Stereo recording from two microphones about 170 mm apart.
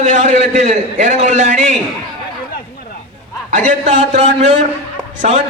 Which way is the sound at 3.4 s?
45° right (ahead or behind).